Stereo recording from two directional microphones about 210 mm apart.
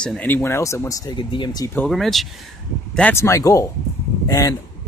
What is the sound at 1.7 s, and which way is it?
Speech, centre (ahead or behind).